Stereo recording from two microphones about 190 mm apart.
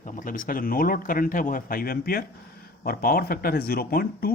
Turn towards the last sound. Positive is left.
turn(degrees=50)  # may be behind; listen again after turning